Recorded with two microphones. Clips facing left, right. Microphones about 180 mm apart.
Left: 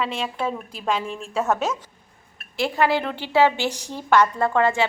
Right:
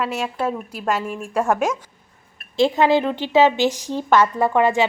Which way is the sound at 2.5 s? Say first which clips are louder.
Right 5 dB; 25° right (ahead or behind).